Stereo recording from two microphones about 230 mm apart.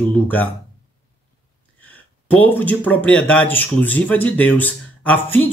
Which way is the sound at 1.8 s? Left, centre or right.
Centre.